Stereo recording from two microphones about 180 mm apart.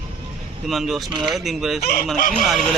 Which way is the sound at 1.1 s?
25° right (ahead or behind).